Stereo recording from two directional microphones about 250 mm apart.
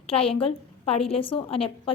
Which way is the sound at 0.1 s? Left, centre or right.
Left.